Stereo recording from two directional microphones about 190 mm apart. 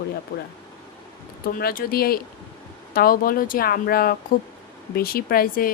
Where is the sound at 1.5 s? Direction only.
50° left (ahead or behind).